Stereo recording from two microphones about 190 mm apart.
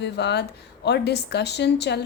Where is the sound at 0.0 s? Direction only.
65° left (ahead or behind).